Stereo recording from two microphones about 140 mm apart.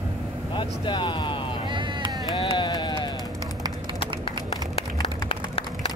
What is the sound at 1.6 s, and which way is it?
Vehicle, 35° right (ahead or behind).